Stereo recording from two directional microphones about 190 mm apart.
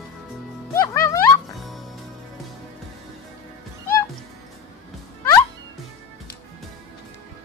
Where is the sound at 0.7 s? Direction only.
15° left (ahead or behind).